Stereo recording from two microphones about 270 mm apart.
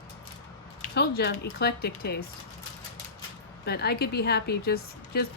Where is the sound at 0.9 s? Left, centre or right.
Left.